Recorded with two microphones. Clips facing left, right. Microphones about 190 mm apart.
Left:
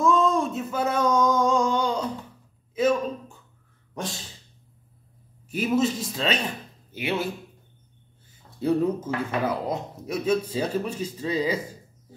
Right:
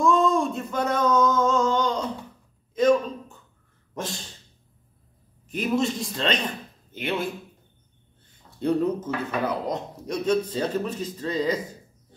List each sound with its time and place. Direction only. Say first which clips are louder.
0.0 s a sound: right 1 dB; centre (ahead or behind)
3.9 s sneeze: right 1 dB; centre (ahead or behind)
5.5 s a man's voice: left 1 dB; 5° left (ahead or behind)
8.3 s speech: even; 5° left (ahead or behind)